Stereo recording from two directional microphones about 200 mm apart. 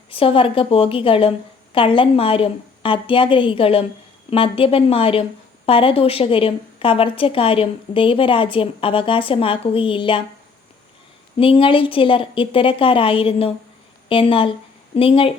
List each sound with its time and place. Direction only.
0.1 s a woman's voice: 25° left (ahead or behind)
11.3 s a woman's voice: 25° left (ahead or behind)